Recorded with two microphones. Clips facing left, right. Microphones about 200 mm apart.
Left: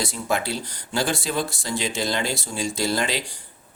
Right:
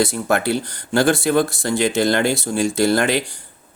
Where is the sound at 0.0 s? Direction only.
65° right (ahead or behind).